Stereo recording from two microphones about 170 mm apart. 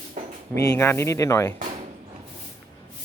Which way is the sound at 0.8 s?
15° left (ahead or behind).